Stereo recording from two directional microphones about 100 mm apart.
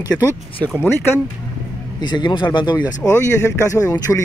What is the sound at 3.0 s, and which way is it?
Speech, 25° left (ahead or behind).